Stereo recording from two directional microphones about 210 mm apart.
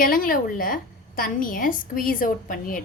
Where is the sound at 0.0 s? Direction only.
40° left (ahead or behind).